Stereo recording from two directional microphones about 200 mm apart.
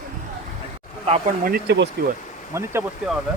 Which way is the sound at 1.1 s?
40° right (ahead or behind).